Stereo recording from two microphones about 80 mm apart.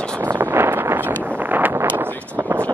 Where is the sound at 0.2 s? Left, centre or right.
Right.